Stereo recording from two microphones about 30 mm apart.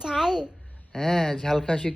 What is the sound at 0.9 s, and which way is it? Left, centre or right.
Speech, centre.